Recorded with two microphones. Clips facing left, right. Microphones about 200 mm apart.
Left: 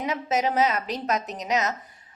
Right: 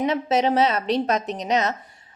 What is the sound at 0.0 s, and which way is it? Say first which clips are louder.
A woman's voice: right 5 dB; 30° right (ahead or behind).